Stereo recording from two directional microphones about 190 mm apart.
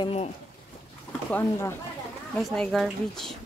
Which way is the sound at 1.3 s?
15° left (ahead or behind).